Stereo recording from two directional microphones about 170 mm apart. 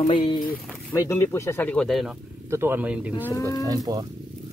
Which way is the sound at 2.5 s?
15° right (ahead or behind).